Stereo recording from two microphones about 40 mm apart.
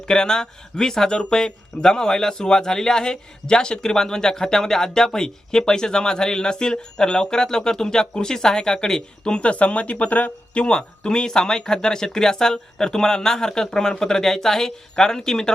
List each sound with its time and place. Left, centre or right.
0.1 s a man's voice: centre; by 10.6 s left
10.6 s a man's voice: left